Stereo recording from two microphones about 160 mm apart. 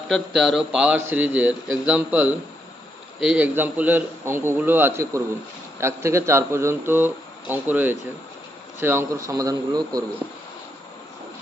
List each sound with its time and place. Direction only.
0.1 s speech: centre (ahead or behind); by 10.0 s 25° right (ahead or behind)